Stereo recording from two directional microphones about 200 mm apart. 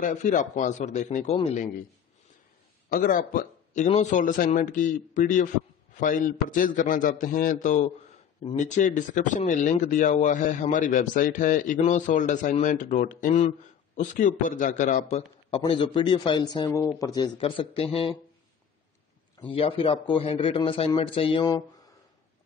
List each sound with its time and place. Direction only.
0.0 s speech: 40° left (ahead or behind)
2.9 s a man's voice: 45° left (ahead or behind)
19.4 s a man's voice: 25° left (ahead or behind)